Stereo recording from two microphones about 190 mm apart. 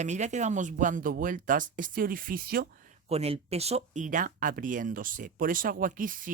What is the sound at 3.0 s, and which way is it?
Speech, 35° right (ahead or behind).